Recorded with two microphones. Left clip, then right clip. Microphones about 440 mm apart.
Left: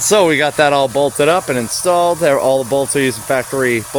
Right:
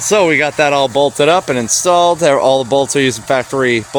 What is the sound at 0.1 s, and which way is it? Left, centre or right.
Speech, left.